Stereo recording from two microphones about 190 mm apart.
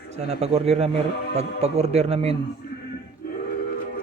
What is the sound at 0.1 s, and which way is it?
Speech, 35° right (ahead or behind).